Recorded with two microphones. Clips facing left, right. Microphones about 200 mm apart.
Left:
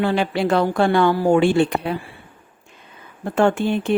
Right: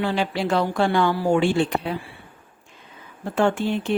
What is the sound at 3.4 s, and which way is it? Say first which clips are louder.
Speech: left 3 dB; 55° left (ahead or behind).